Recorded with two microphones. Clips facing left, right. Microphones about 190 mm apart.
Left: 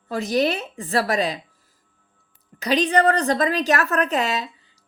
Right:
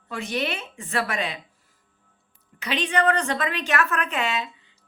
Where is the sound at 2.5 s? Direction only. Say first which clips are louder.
Left 6 dB; 40° left (ahead or behind).